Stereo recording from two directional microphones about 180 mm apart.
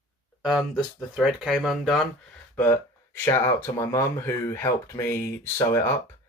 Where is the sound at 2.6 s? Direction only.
10° left (ahead or behind).